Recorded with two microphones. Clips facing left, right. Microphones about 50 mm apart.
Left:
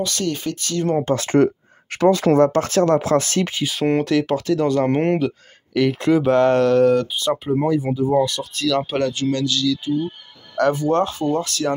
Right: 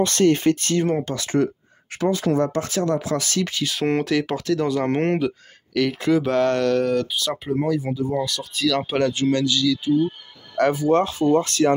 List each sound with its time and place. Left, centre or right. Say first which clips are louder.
0.0 s speech: right 6 dB; right
1.1 s speech: left 5 dB; left
1.9 s speech: left 6 dB; left
3.6 s speech: left 2 dB; centre; by 7.9 s left
8.0 s speech: left 6 dB; centre
9.1 s speech: right 1 dB; centre
9.4 s speech: even; centre
11.2 s speech: right 3 dB; right